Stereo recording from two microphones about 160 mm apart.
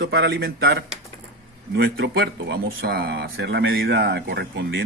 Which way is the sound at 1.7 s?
90° right.